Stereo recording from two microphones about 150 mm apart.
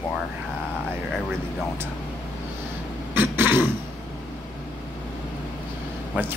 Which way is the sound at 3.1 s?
15° right (ahead or behind).